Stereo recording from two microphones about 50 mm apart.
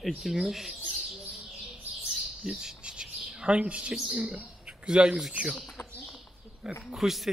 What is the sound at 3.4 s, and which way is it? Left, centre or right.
Speech, right.